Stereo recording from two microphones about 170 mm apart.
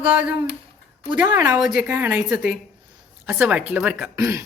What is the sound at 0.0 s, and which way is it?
Speech, 10° right (ahead or behind).